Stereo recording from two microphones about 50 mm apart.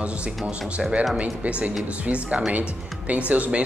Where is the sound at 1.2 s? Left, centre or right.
Right.